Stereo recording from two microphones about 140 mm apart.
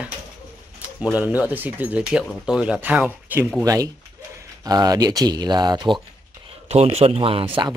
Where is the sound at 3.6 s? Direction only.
25° right (ahead or behind).